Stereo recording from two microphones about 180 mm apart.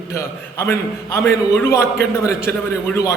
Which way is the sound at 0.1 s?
15° left (ahead or behind).